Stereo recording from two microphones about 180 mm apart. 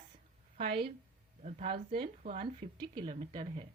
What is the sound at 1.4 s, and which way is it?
A woman's voice, 35° right (ahead or behind).